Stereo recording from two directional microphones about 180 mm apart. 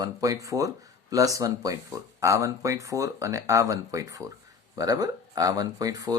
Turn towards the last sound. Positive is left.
turn(degrees=-20)  # may be behind; listen again after turning